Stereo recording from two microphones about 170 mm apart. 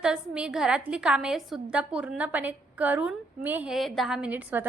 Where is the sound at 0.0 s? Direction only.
5° right (ahead or behind).